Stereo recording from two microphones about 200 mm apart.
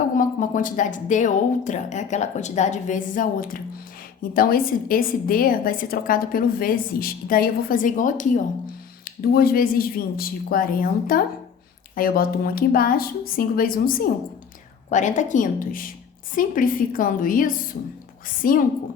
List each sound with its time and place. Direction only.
0.2 s a woman's voice: 40° left (ahead or behind)